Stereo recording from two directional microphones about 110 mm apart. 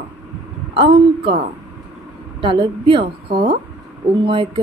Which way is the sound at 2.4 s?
50° right (ahead or behind).